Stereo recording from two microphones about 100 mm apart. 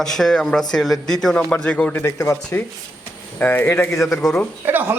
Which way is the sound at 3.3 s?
20° left (ahead or behind).